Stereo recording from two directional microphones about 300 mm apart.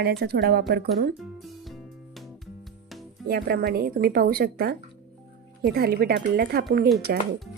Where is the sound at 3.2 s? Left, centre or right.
Right.